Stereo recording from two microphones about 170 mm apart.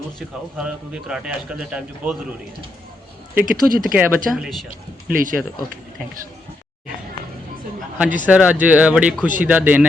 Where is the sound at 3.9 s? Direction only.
5° right (ahead or behind).